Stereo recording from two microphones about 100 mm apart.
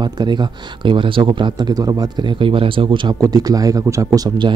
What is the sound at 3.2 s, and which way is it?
Speech, 40° right (ahead or behind).